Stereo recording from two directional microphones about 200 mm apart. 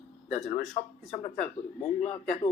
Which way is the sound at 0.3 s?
35° left (ahead or behind).